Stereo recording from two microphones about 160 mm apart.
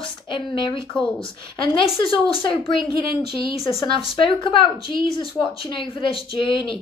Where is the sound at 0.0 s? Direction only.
30° left (ahead or behind).